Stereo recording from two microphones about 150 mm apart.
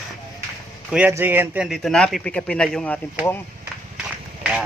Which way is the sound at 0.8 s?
10° right (ahead or behind).